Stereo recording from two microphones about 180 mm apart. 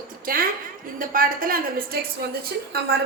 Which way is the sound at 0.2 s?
50° right (ahead or behind).